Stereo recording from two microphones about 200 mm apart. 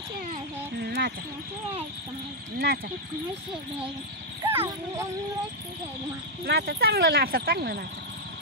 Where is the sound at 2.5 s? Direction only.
50° right (ahead or behind).